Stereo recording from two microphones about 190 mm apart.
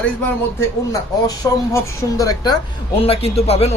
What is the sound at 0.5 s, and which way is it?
Speech, 20° left (ahead or behind).